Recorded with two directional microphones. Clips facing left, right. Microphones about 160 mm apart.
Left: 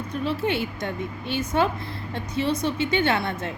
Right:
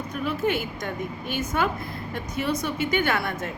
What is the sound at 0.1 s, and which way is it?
A woman's voice, 30° left (ahead or behind).